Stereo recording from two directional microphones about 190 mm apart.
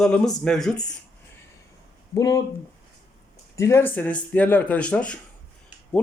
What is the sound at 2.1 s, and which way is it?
Speech, 20° left (ahead or behind).